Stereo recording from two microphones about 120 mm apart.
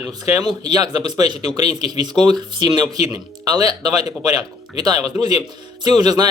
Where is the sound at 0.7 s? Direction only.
35° right (ahead or behind).